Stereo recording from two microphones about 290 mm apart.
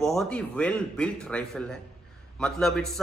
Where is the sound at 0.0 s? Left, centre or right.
Centre.